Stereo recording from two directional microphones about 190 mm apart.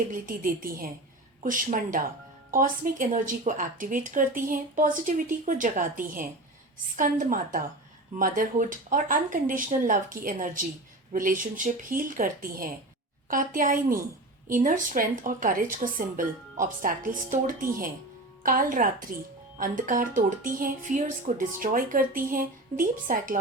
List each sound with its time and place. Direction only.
0.1 s a woman's voice: 45° right (ahead or behind)